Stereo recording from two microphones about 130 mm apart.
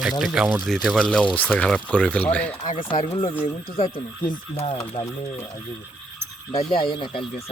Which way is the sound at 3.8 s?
40° left (ahead or behind).